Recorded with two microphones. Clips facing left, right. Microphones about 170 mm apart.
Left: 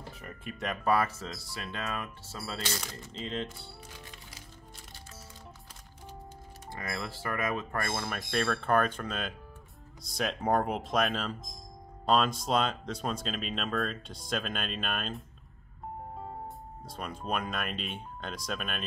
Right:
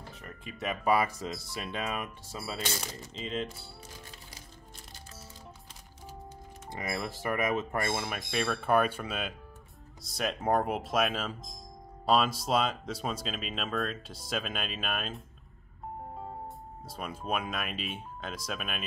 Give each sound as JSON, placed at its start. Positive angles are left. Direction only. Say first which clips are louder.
{"t": 0.2, "sound": "speech", "louder": "even", "side_deg": 0}
{"t": 3.1, "sound": "speech", "louder": "right 1 dB", "side_deg": 0}
{"t": 6.7, "sound": "speech", "louder": "right 2 dB", "side_deg": -15}
{"t": 7.9, "sound": "speech", "louder": "even", "side_deg": -10}
{"t": 16.8, "sound": "speech", "louder": "even", "side_deg": -5}